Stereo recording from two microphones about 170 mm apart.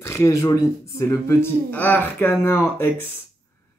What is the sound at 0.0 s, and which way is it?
Speech, 15° left (ahead or behind).